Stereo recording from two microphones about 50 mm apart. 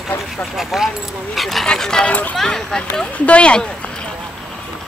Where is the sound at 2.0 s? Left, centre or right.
Left.